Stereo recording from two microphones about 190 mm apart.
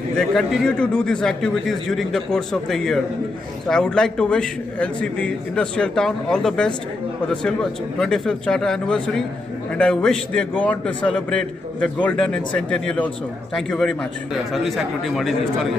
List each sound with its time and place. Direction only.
0.2 s a man's voice: centre (ahead or behind)
8.0 s a man's voice: 5° left (ahead or behind)